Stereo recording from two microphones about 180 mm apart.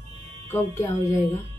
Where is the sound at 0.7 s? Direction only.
15° left (ahead or behind).